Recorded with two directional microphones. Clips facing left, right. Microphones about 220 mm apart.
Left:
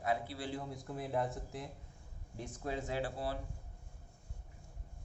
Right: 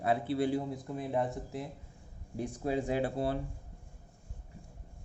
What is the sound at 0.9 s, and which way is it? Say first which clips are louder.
Speech: right 3 dB; centre (ahead or behind).